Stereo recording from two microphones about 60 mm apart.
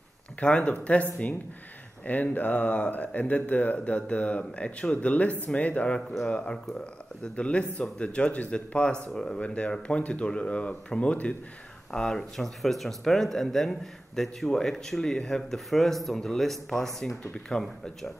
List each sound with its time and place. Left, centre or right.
0.4 s speech: centre
2.0 s speech: left
11.9 s speech: centre